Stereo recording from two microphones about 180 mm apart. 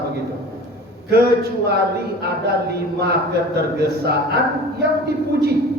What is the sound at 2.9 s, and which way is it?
A man's voice, 60° right (ahead or behind).